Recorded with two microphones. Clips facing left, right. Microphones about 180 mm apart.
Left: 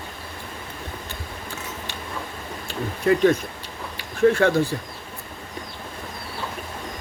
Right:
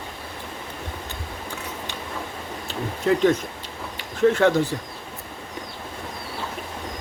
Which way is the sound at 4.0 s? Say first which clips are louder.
Even; 20° right (ahead or behind).